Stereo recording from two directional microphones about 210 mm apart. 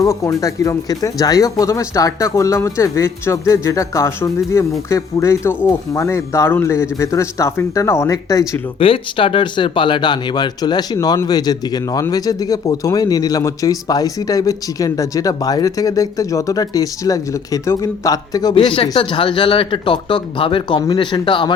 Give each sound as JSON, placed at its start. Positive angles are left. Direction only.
{"t": 0.0, "sound": "speech", "side_deg": 15}